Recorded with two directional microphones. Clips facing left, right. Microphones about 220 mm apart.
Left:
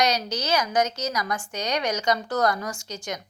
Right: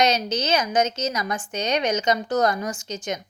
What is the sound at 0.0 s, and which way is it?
A woman's voice, 20° right (ahead or behind).